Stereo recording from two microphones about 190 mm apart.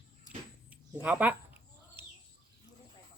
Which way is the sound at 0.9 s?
10° right (ahead or behind).